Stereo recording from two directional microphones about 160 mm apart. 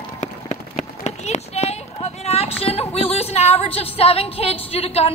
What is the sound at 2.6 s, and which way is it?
Music, 40° left (ahead or behind).